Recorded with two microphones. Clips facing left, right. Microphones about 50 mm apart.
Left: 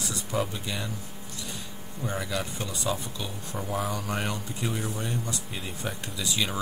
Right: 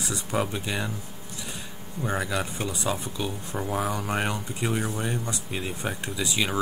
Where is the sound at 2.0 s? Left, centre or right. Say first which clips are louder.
Right 3 dB; right.